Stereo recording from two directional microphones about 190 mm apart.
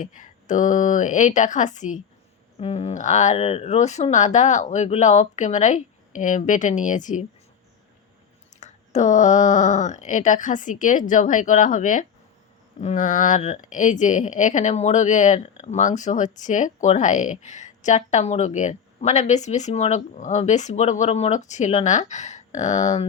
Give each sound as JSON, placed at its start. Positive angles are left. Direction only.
{"t": 0.0, "sound": "speech", "side_deg": 40}
{"t": 8.6, "sound": "speech", "side_deg": 35}